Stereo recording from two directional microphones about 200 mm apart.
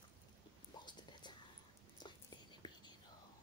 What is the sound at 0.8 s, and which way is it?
Whispering, 20° left (ahead or behind).